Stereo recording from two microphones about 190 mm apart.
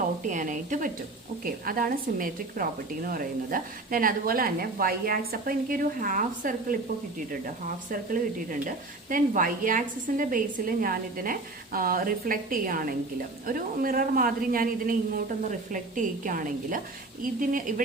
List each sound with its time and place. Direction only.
0.3 s a woman's voice: 40° right (ahead or behind)